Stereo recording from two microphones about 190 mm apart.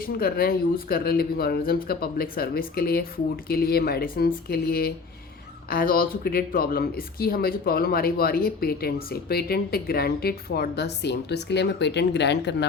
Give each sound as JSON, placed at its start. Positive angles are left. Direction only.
{"t": 0.0, "sound": "speech", "side_deg": 50}